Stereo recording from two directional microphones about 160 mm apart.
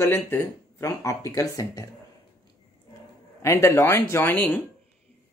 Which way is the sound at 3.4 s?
15° left (ahead or behind).